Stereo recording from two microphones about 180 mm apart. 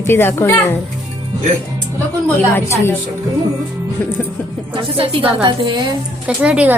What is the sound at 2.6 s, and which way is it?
Speech, 15° left (ahead or behind).